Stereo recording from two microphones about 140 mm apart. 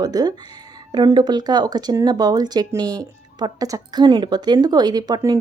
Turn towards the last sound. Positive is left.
turn(degrees=-25)  # may be behind; listen again after turning